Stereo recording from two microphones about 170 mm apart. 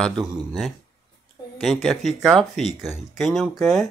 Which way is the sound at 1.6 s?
Centre (ahead or behind).